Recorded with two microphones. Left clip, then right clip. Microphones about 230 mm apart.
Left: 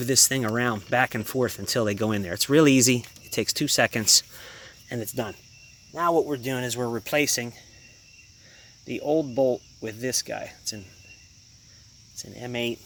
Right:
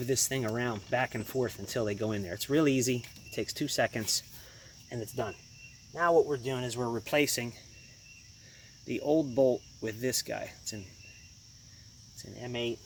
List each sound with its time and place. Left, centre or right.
0.0 s speech: left
8.9 s speech: centre
12.1 s speech: left
12.5 s speech: left